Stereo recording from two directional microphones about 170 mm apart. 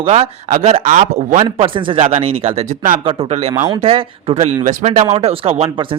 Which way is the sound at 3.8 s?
35° right (ahead or behind).